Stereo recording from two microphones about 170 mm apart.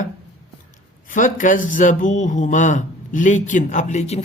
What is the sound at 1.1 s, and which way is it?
Speech, 50° left (ahead or behind).